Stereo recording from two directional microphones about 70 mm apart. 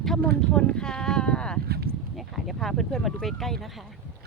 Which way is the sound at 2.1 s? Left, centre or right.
Centre.